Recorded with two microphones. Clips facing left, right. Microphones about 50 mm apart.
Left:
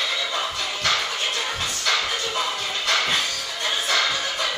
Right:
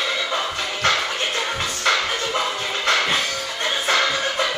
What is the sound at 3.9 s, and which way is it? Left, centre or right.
Music, right.